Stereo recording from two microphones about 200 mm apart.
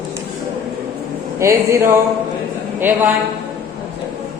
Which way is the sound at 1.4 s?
15° right (ahead or behind).